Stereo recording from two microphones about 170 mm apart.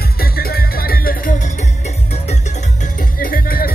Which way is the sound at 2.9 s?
55° left (ahead or behind).